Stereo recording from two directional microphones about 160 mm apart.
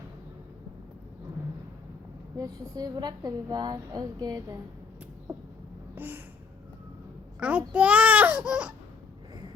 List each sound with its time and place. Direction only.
2.4 s a woman's voice: 25° right (ahead or behind)
5.3 s a sound: 15° right (ahead or behind)
7.3 s babbling: 10° right (ahead or behind)